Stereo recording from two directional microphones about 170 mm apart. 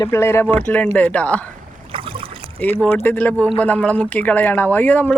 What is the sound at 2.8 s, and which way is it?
Speech, 10° left (ahead or behind).